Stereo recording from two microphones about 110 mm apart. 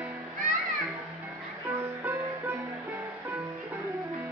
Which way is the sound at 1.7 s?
20° right (ahead or behind).